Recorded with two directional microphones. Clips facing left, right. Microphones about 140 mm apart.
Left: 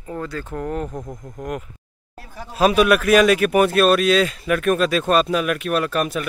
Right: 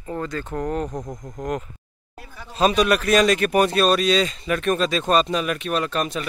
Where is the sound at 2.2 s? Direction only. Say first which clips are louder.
Left 4 dB; 35° left (ahead or behind).